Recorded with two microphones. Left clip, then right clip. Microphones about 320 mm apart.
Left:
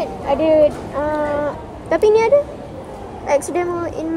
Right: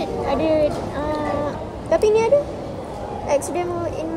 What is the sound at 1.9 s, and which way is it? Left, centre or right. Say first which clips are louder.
A woman's voice: left 3 dB; left.